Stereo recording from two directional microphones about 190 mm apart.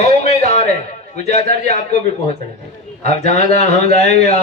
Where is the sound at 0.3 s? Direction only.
35° left (ahead or behind).